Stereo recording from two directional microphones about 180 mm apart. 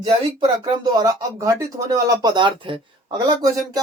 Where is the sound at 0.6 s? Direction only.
20° right (ahead or behind).